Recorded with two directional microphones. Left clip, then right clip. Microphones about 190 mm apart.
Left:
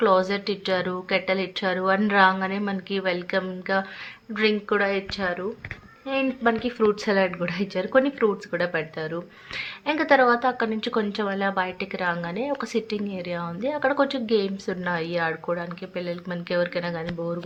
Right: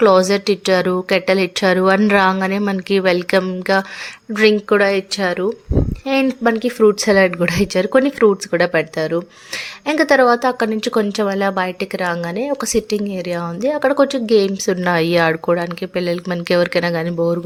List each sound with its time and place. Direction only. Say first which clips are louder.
0.0 s a woman's voice: right 9 dB; 45° right (ahead or behind)
6.4 s a woman's voice: right 8 dB; 40° right (ahead or behind)